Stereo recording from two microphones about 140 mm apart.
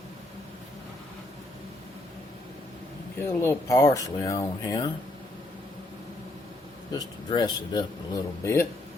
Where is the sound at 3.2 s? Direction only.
20° left (ahead or behind).